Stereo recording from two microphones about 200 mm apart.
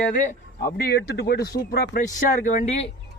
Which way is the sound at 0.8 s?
50° left (ahead or behind).